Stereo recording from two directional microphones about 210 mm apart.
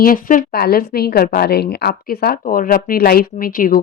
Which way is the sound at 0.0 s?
40° left (ahead or behind).